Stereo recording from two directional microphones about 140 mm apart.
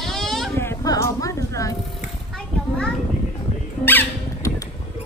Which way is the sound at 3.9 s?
15° left (ahead or behind).